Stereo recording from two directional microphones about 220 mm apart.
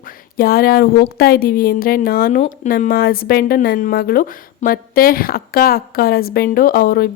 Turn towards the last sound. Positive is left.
turn(degrees=45)  # may be behind; listen again after turning